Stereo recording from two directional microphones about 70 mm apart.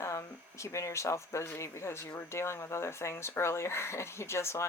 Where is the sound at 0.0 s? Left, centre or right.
Left.